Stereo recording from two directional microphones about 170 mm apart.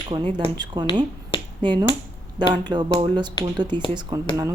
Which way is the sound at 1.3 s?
30° left (ahead or behind).